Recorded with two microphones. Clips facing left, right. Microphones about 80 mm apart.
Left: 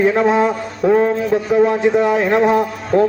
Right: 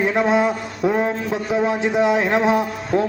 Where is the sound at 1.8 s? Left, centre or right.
Centre.